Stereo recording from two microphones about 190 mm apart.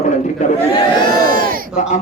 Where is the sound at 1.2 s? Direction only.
50° right (ahead or behind).